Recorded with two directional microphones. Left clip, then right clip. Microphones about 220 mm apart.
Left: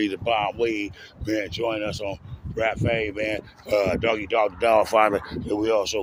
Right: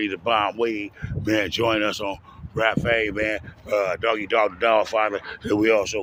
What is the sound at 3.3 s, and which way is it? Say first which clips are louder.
Speech: left 1 dB; centre (ahead or behind).